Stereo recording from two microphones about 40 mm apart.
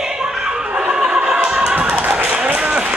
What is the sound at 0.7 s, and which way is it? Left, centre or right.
Opera, right.